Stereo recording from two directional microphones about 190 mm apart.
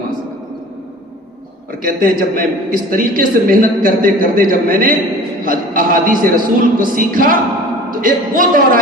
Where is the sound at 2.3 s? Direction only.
45° right (ahead or behind).